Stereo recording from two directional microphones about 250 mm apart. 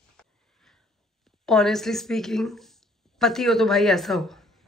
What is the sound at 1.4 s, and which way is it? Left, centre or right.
A woman's voice, centre.